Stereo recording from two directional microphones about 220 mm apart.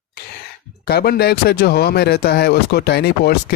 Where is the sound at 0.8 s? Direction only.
45° left (ahead or behind).